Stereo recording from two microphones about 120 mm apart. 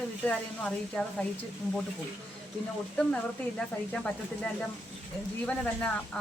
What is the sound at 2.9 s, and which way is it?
Speech, 10° left (ahead or behind).